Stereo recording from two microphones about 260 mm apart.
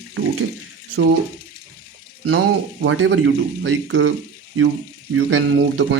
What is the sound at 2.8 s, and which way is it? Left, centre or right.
A man's voice, right.